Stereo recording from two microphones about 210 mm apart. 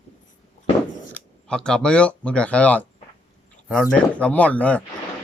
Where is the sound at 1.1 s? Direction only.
5° left (ahead or behind).